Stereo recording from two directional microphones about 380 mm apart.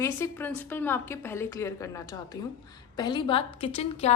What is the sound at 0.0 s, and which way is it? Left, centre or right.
A woman's voice, centre.